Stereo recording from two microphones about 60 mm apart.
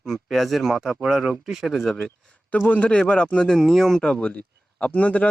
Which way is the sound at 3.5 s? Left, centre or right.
Centre.